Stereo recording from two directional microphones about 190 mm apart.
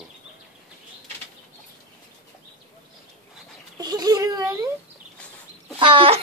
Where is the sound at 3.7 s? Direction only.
20° right (ahead or behind).